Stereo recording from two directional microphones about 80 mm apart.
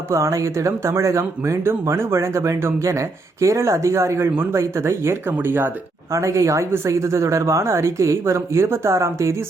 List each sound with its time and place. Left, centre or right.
0.1 s speech: right